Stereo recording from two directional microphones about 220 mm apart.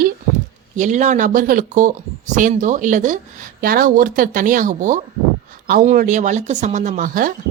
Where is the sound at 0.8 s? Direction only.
35° right (ahead or behind).